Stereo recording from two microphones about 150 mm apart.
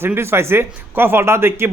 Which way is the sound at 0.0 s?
15° right (ahead or behind).